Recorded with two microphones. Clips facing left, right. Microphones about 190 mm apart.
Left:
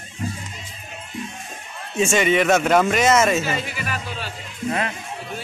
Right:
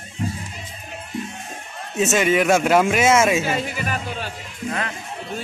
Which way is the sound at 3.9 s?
45° right (ahead or behind).